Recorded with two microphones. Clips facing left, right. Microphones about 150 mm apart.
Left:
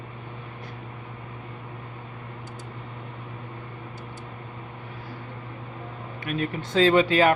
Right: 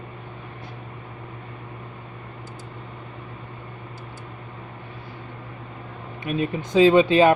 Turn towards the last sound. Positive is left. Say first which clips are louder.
# right 4 dB
turn(degrees=-20)  # may be behind; listen again after turning